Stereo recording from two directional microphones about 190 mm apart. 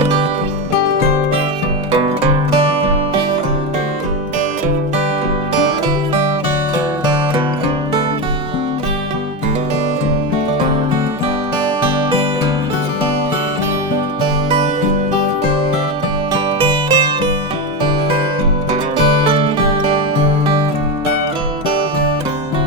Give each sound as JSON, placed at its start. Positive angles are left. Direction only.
{"t": 1.9, "sound": "music", "side_deg": -30}
{"t": 6.7, "sound": "music", "side_deg": -20}
{"t": 11.8, "sound": "music", "side_deg": -30}
{"t": 16.3, "sound": "music", "side_deg": -20}
{"t": 19.2, "sound": "music", "side_deg": -30}